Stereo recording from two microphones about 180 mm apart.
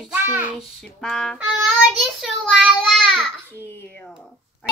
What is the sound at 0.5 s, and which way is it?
A child's voice, centre (ahead or behind).